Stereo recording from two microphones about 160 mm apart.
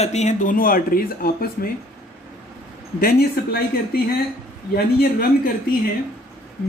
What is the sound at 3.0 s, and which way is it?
Speech, 70° left (ahead or behind).